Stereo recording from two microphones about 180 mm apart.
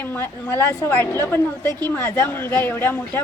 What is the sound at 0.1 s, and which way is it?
Speech, 15° left (ahead or behind).